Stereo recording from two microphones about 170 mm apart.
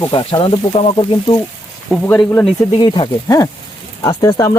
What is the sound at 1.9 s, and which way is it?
Speech, 10° left (ahead or behind).